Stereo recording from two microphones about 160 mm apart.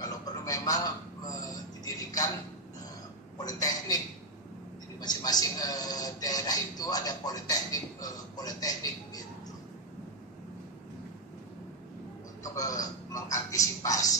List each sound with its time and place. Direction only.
0.0 s a sound: 25° left (ahead or behind)
3.4 s a man's voice: 25° left (ahead or behind)
5.0 s a man's voice: 25° left (ahead or behind)
12.5 s a man's voice: 20° left (ahead or behind)